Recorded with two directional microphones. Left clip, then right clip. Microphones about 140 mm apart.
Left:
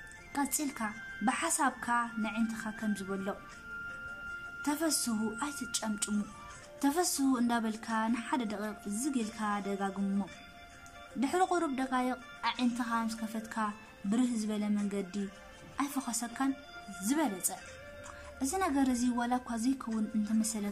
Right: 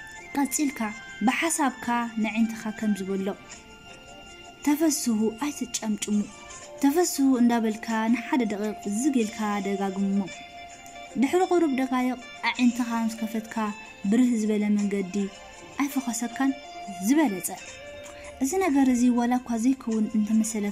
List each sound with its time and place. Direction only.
0.3 s speech: 20° right (ahead or behind)
4.6 s speech: 20° right (ahead or behind)
11.1 s a woman's voice: 15° right (ahead or behind)